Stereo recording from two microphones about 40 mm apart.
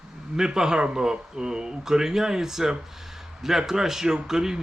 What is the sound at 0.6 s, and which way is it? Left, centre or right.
Speech, centre.